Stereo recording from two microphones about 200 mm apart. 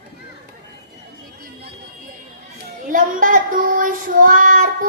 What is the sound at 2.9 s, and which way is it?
Child singing, 45° right (ahead or behind).